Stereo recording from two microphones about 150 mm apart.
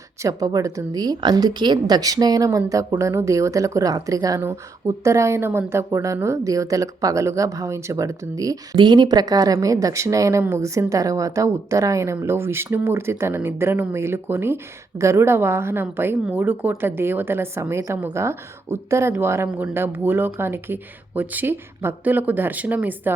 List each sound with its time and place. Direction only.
0.2 s a woman's voice: 20° right (ahead or behind)